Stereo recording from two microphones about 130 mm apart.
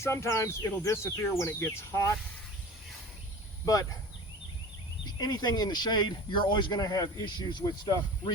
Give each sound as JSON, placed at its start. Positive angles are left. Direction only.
{"t": 0.0, "sound": "speech", "side_deg": 20}
{"t": 5.0, "sound": "speech", "side_deg": 30}